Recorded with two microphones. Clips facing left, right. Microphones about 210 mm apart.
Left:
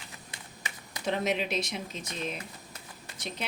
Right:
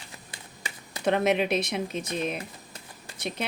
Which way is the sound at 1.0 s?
60° right (ahead or behind).